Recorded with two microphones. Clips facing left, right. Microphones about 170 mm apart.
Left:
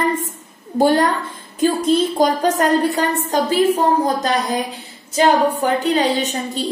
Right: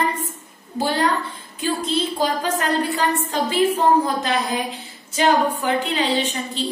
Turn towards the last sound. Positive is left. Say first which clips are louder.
# left 3 dB
turn(degrees=45)  # may be behind; listen again after turning